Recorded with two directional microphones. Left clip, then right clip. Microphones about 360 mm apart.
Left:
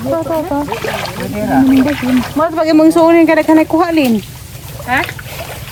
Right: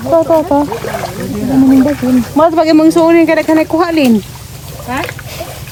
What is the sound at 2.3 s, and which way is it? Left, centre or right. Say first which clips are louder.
Speech: right 4 dB; centre.